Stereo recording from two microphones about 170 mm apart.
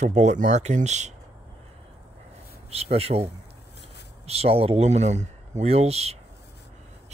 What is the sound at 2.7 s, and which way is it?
Speech, 35° right (ahead or behind).